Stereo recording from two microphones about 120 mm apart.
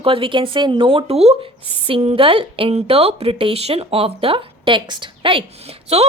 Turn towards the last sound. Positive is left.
turn(degrees=-55)  # may be behind; listen again after turning